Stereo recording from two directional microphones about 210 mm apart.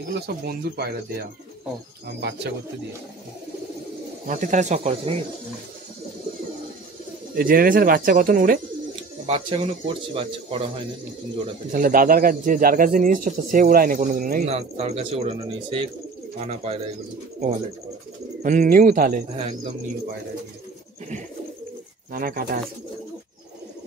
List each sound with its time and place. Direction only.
0.1 s speech: 50° right (ahead or behind)
4.3 s a man's voice: 35° right (ahead or behind)
7.3 s a man's voice: 45° right (ahead or behind)
9.2 s speech: 25° right (ahead or behind)
11.7 s a man's voice: 40° right (ahead or behind)
14.5 s speech: 30° right (ahead or behind)
18.4 s a man's voice: 40° right (ahead or behind)
19.3 s speech: 30° right (ahead or behind)
22.1 s speech: 45° right (ahead or behind)